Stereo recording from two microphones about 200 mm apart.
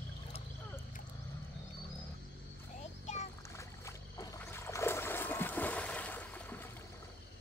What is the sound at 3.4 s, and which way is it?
Boat, 15° left (ahead or behind).